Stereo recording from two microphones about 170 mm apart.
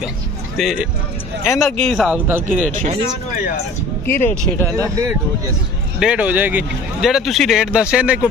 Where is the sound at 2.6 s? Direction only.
45° right (ahead or behind).